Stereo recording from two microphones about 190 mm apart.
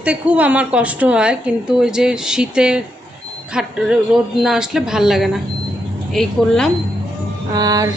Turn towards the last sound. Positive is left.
turn(degrees=-20)  # may be behind; listen again after turning